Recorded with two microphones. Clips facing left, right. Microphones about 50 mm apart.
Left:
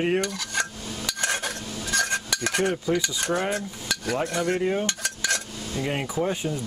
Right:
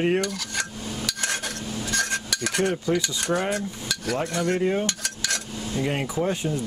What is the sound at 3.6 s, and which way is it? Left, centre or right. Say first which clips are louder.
Stir: even; centre.